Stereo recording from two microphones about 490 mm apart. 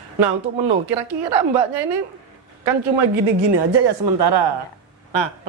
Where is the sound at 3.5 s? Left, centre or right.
Right.